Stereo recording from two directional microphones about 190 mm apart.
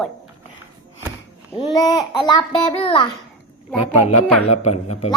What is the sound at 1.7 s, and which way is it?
A woman's voice, 20° left (ahead or behind).